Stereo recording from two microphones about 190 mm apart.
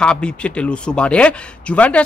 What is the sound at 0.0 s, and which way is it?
Speech, 5° left (ahead or behind).